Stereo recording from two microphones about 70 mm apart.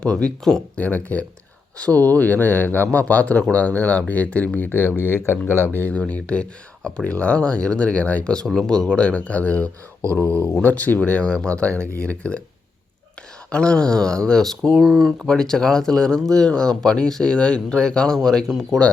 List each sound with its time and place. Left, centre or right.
0.0 s speech: centre
10.2 s speech: right
10.5 s speech: left
11.7 s speech: right
12.0 s speech: centre
13.5 s speech: centre